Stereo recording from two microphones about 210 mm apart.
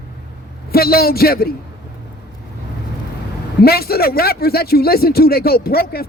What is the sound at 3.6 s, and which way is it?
Speech, 45° left (ahead or behind).